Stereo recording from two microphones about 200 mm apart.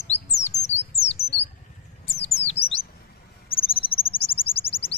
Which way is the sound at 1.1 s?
30° left (ahead or behind).